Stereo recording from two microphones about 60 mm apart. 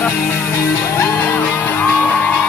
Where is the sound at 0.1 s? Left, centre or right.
Left.